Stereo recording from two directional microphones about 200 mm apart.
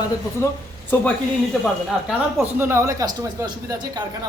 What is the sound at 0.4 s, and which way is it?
Speech, 15° left (ahead or behind).